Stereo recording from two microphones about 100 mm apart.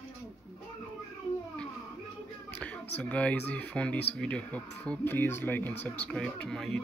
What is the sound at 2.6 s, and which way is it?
Speech, 15° left (ahead or behind).